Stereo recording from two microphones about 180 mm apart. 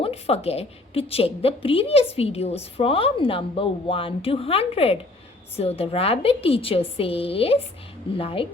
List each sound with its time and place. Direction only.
0.0 s a woman's voice: 35° left (ahead or behind)